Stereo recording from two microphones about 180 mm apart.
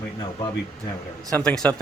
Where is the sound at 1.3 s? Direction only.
5° left (ahead or behind).